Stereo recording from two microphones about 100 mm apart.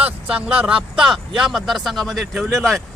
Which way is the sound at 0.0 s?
15° right (ahead or behind).